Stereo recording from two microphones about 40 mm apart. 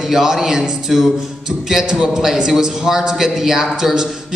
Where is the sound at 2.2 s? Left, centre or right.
Centre.